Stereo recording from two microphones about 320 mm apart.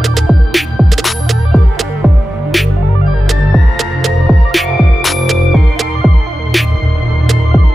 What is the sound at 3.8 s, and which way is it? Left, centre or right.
Music, centre.